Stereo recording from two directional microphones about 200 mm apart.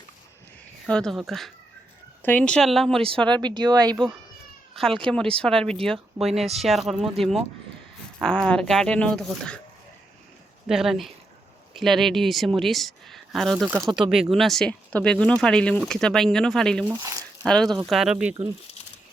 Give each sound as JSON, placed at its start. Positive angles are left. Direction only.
{"t": 0.9, "sound": "speech", "side_deg": 5}
{"t": 3.3, "sound": "speech", "side_deg": -20}
{"t": 4.7, "sound": "speech", "side_deg": 0}
{"t": 10.7, "sound": "speech", "side_deg": 0}
{"t": 16.9, "sound": "speech", "side_deg": -15}
{"t": 17.4, "sound": "speech", "side_deg": 5}